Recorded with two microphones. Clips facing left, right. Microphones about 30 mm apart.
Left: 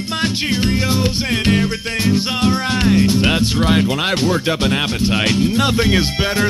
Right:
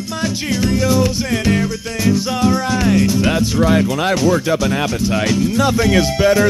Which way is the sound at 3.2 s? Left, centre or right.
Left.